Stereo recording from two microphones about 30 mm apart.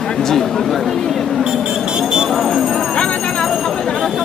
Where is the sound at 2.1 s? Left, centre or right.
Right.